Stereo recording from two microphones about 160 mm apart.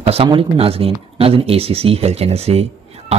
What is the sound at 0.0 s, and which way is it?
Speech, 40° right (ahead or behind).